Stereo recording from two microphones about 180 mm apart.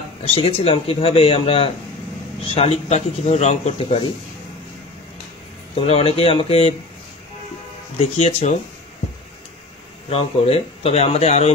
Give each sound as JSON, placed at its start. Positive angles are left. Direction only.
{"t": 0.2, "sound": "speech", "side_deg": 30}
{"t": 5.8, "sound": "speech", "side_deg": 30}
{"t": 8.0, "sound": "speech", "side_deg": 35}
{"t": 10.0, "sound": "speech", "side_deg": 35}